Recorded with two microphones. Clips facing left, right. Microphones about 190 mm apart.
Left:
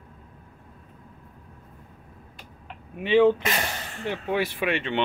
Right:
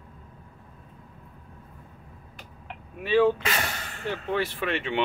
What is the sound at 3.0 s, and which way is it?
Speech, 20° left (ahead or behind).